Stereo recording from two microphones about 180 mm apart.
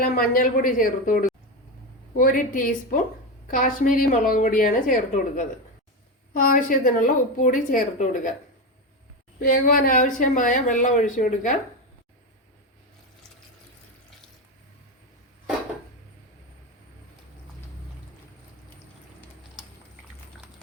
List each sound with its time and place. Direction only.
0.0 s speech: 50° left (ahead or behind)
9.4 s speech: 45° left (ahead or behind)